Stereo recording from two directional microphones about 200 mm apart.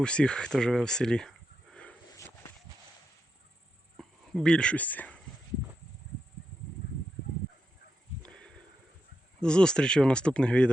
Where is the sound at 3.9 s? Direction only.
5° left (ahead or behind).